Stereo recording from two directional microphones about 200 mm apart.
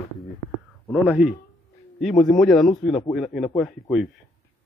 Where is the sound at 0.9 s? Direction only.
5° right (ahead or behind).